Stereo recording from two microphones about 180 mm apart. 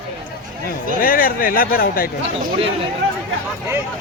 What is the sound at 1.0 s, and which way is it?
Speech, 50° left (ahead or behind).